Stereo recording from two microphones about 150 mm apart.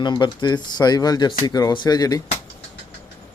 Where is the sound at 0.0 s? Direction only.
30° left (ahead or behind).